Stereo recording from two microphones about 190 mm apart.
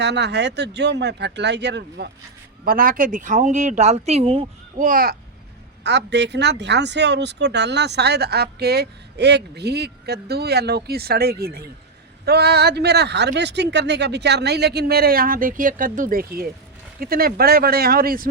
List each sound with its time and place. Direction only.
0.0 s speech: 65° right (ahead or behind)
2.6 s speech: 50° right (ahead or behind); by 4.4 s 30° right (ahead or behind)
4.8 s speech: 45° right (ahead or behind)
5.8 s speech: 65° right (ahead or behind)